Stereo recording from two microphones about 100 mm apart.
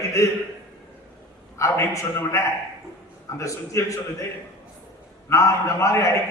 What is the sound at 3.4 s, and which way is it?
Speech, 30° left (ahead or behind).